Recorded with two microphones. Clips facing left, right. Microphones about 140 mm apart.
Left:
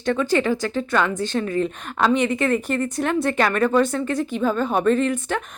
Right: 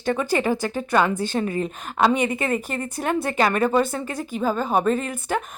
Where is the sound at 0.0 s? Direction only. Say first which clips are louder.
Left 2 dB; 10° right (ahead or behind).